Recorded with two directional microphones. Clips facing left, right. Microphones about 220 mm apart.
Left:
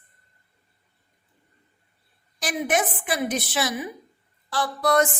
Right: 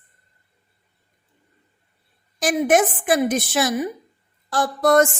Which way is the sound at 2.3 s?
45° right (ahead or behind).